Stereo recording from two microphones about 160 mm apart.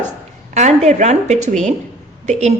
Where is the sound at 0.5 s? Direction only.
45° right (ahead or behind).